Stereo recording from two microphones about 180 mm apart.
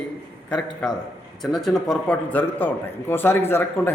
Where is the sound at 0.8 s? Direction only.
5° left (ahead or behind).